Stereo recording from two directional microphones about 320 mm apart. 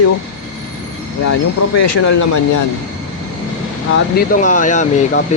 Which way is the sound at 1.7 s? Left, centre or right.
Left.